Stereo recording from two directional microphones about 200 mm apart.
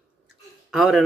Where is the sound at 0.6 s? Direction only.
Centre (ahead or behind).